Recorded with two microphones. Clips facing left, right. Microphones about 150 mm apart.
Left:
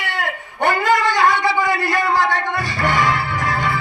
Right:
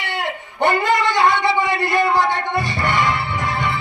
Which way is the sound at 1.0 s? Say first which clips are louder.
Even; 25° right (ahead or behind).